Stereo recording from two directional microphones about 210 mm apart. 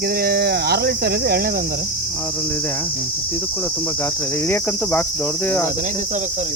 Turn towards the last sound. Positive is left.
turn(degrees=10)  # may be behind; listen again after turning